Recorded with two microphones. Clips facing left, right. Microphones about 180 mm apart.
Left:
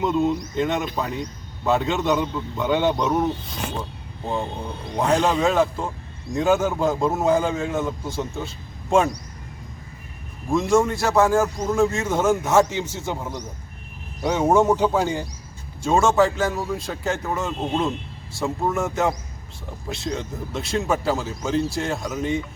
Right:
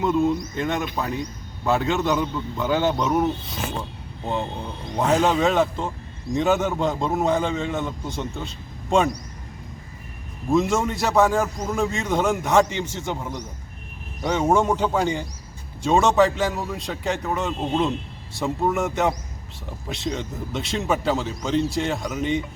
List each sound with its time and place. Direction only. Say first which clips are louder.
0.0 s a man's voice: right 1 dB; centre (ahead or behind)
4.9 s a man's voice: even; centre (ahead or behind)
10.5 s a man's voice: left 2 dB; centre (ahead or behind)